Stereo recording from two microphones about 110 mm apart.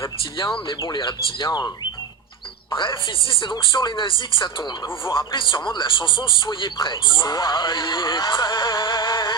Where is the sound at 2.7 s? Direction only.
50° left (ahead or behind).